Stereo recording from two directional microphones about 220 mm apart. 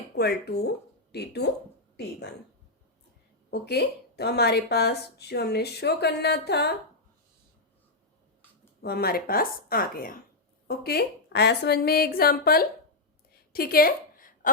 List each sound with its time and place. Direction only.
0.2 s speech: 45° left (ahead or behind)
3.5 s speech: 50° left (ahead or behind)
8.8 s a woman's voice: 45° left (ahead or behind)
13.5 s a sound: 45° left (ahead or behind)